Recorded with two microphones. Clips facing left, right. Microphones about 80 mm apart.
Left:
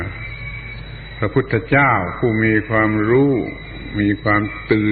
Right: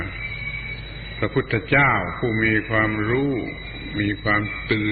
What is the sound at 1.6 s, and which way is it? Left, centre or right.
Speech, centre.